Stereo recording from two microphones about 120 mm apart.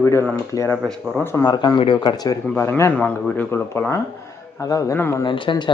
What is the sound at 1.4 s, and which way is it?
Speech, 40° left (ahead or behind).